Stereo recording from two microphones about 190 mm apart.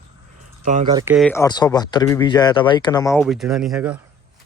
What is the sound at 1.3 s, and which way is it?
Speech, 20° left (ahead or behind).